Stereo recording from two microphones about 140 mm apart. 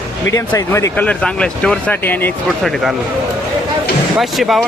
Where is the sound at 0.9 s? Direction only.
10° left (ahead or behind).